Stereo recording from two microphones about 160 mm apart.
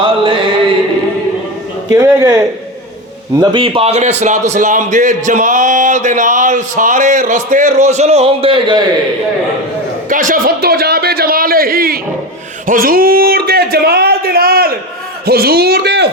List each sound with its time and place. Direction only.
0.0 s chant: 30° right (ahead or behind)
1.9 s a man's voice: 25° right (ahead or behind)
10.1 s a man's voice: 55° right (ahead or behind)
12.6 s a sound: 60° right (ahead or behind)
15.3 s speech: 75° right (ahead or behind)